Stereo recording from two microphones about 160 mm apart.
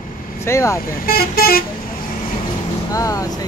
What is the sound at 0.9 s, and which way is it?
Speech, 70° left (ahead or behind).